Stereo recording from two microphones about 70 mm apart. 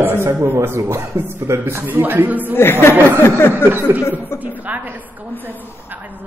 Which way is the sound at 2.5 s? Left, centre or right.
Left.